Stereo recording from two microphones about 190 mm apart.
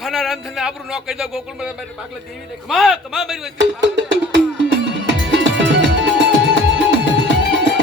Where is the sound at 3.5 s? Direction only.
65° right (ahead or behind).